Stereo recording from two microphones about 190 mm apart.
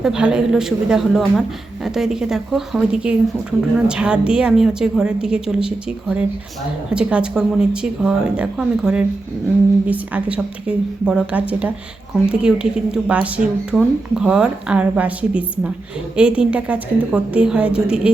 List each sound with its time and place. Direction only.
0.0 s a woman's voice: 5° right (ahead or behind)